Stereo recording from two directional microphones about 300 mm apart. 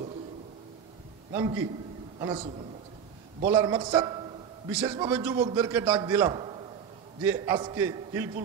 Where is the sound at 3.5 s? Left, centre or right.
Centre.